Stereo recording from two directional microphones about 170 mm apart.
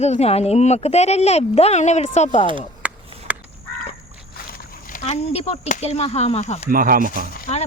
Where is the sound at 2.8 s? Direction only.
10° right (ahead or behind).